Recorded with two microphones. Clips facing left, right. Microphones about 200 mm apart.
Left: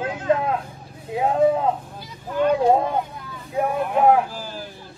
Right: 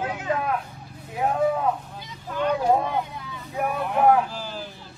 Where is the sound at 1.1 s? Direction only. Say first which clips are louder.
Left 4 dB; 25° left (ahead or behind).